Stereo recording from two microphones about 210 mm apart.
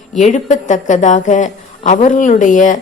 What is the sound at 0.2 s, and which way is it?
A woman's voice, 35° left (ahead or behind).